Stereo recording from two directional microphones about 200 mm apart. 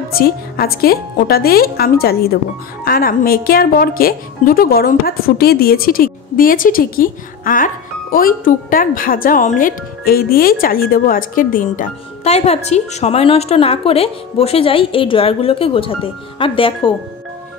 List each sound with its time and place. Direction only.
0.2 s speech: 50° left (ahead or behind); by 16.9 s 25° left (ahead or behind)